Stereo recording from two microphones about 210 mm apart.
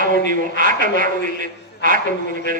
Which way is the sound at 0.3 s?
40° right (ahead or behind).